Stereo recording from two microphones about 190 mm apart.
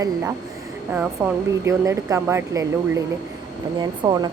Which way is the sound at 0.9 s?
15° right (ahead or behind).